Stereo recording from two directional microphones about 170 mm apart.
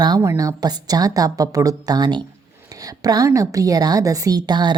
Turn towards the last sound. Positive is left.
turn(degrees=-25)  # may be behind; listen again after turning